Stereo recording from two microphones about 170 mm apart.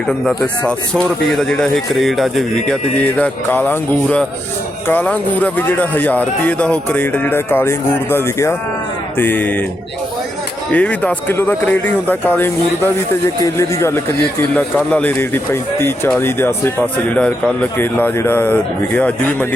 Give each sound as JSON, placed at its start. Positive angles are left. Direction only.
{"t": 1.3, "sound": "a man's voice", "side_deg": 0}
{"t": 10.7, "sound": "speech", "side_deg": 5}